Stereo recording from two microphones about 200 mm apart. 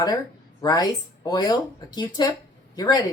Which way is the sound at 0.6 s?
20° left (ahead or behind).